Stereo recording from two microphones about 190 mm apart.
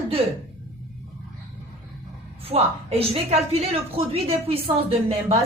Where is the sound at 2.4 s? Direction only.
30° right (ahead or behind).